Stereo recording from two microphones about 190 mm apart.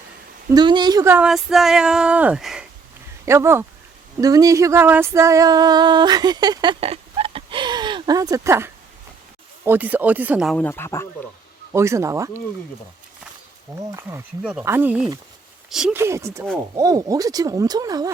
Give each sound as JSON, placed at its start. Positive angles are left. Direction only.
{"t": 0.5, "sound": "speech", "side_deg": -25}
{"t": 3.2, "sound": "speech", "side_deg": -15}
{"t": 4.2, "sound": "a sound", "side_deg": -20}
{"t": 9.6, "sound": "speech", "side_deg": -10}
{"t": 10.6, "sound": "speech", "side_deg": 10}
{"t": 11.7, "sound": "speech", "side_deg": -15}
{"t": 13.9, "sound": "speech", "side_deg": -10}
{"t": 16.0, "sound": "speech", "side_deg": -15}